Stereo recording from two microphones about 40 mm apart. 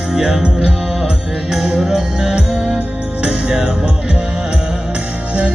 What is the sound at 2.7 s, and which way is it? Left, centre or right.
Music, right.